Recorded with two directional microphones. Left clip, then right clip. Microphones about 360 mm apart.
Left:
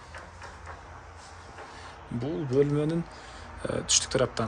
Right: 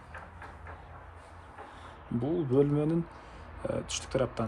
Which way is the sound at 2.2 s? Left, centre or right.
Centre.